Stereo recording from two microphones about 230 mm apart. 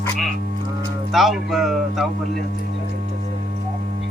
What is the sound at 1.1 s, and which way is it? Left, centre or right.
Speech, centre.